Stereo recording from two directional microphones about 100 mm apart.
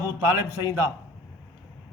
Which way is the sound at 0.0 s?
30° right (ahead or behind).